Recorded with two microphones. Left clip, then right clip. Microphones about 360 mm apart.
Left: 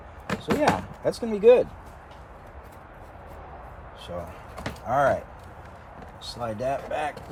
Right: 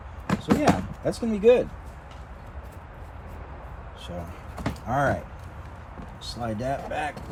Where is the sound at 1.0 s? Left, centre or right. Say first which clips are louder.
Left 2 dB; centre.